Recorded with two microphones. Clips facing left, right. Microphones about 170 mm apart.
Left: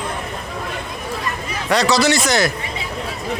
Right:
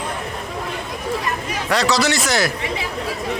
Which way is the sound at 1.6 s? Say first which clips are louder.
Left 3 dB; centre (ahead or behind).